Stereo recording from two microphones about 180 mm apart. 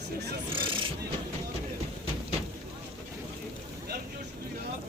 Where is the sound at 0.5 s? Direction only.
30° right (ahead or behind).